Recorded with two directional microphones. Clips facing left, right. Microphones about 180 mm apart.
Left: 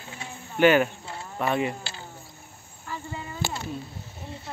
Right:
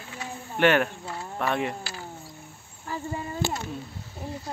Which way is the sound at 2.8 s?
35° right (ahead or behind).